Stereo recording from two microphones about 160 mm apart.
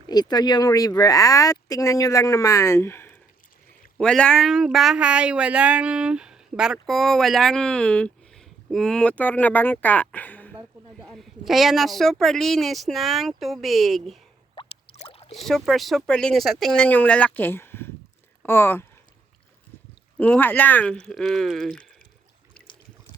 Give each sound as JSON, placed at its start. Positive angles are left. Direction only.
{"t": 0.1, "sound": "speech", "side_deg": 25}
{"t": 3.9, "sound": "speech", "side_deg": 5}
{"t": 11.1, "sound": "speech", "side_deg": 0}
{"t": 14.5, "sound": "a sound", "side_deg": 35}
{"t": 15.4, "sound": "speech", "side_deg": 0}
{"t": 20.1, "sound": "speech", "side_deg": 10}
{"t": 22.5, "sound": "a sound", "side_deg": 10}